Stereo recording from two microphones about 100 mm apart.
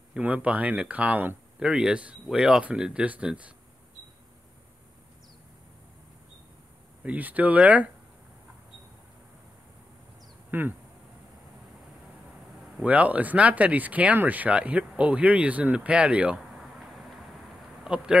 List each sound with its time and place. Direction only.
0.1 s speech: 15° right (ahead or behind)
7.0 s speech: 15° right (ahead or behind)
10.5 s speech: 20° right (ahead or behind)
12.8 s speech: 15° right (ahead or behind)
16.5 s vehicle: centre (ahead or behind)
17.8 s speech: 10° right (ahead or behind)